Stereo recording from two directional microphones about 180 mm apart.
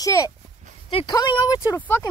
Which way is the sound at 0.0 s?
20° left (ahead or behind).